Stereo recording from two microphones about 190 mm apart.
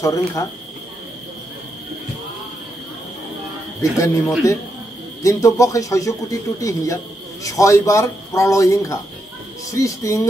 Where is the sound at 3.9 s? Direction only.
15° left (ahead or behind).